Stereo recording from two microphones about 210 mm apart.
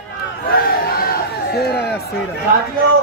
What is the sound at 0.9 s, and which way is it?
Crowd, 45° left (ahead or behind).